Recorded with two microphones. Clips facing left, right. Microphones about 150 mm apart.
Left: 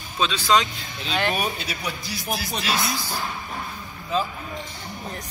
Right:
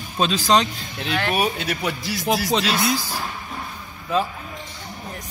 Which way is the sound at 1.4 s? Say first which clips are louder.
Right 5 dB; 60° right (ahead or behind).